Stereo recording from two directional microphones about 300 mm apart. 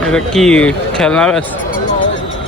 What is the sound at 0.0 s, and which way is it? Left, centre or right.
Speech, centre.